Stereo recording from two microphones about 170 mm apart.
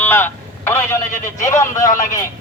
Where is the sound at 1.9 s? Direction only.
50° left (ahead or behind).